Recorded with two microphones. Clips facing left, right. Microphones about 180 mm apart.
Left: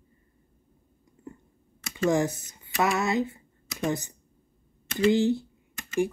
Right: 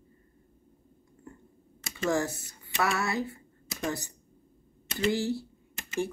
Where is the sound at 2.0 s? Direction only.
20° left (ahead or behind).